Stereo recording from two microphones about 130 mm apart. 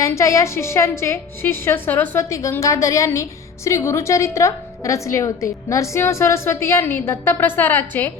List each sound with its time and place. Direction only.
0.0 s a woman's voice: 25° left (ahead or behind)